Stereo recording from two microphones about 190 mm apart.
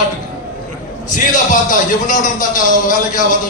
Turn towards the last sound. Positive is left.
turn(degrees=45)  # may be behind; listen again after turning